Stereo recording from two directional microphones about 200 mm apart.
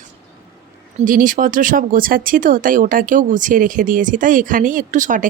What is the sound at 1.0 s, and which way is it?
Speech, 40° right (ahead or behind).